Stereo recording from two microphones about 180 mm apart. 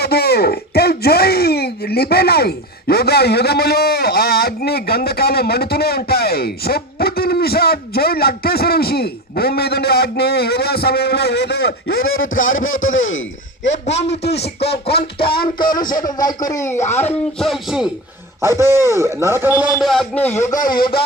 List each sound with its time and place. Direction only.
0.0 s speech: 60° left (ahead or behind); by 13.8 s 90° left
14.3 s speech: 35° left (ahead or behind)
14.6 s speech: 65° left (ahead or behind)
15.5 s speech: 25° left (ahead or behind)
16.8 s speech: 40° left (ahead or behind)
17.1 s music: centre (ahead or behind)
18.4 s a man's voice: 15° right (ahead or behind)
19.8 s music: centre (ahead or behind)